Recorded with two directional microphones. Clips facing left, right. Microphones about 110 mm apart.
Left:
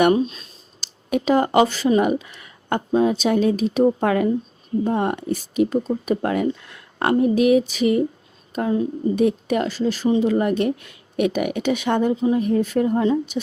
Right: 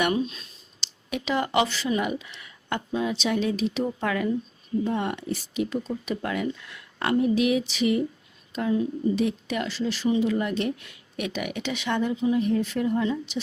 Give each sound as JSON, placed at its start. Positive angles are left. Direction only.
{"t": 0.0, "sound": "speech", "side_deg": 35}